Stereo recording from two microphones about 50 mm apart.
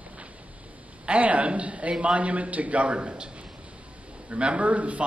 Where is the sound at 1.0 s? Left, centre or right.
Right.